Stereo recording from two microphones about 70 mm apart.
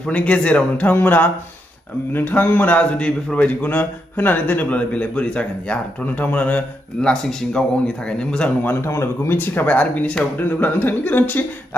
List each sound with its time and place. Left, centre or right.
0.0 s a man's voice: centre
7.0 s a man's voice: centre
8.6 s speech: left
9.5 s a man's voice: left